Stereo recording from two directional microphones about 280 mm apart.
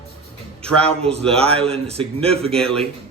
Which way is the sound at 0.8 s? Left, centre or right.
Right.